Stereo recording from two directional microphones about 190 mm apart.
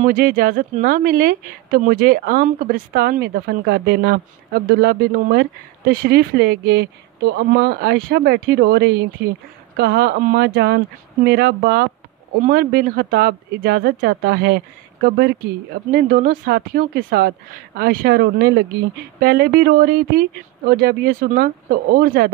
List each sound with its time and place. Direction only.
0.0 s speech: 45° right (ahead or behind)